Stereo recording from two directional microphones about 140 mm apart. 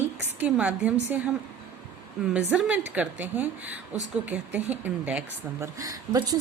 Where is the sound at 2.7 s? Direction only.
10° right (ahead or behind).